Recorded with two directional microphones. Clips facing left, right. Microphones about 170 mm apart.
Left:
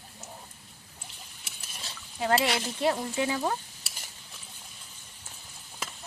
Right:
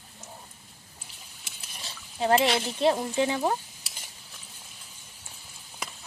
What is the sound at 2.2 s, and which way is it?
Speech, 25° right (ahead or behind).